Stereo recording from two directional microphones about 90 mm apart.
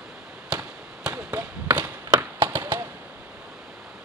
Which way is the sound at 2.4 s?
25° right (ahead or behind).